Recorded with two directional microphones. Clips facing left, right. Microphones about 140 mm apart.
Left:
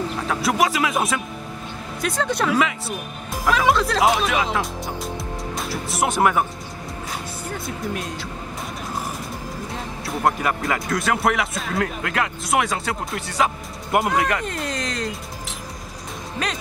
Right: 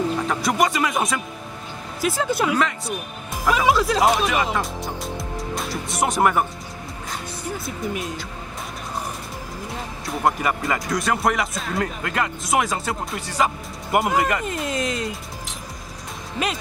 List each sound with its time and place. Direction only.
0.3 s speech: centre (ahead or behind)
7.5 s speech: centre (ahead or behind)
10.0 s speech: centre (ahead or behind)